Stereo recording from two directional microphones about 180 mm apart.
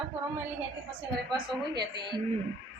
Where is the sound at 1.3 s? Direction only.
25° right (ahead or behind).